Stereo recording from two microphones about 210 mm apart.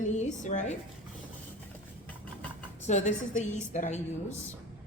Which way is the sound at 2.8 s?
35° left (ahead or behind).